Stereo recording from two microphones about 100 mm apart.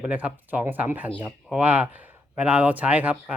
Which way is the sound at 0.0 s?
15° right (ahead or behind).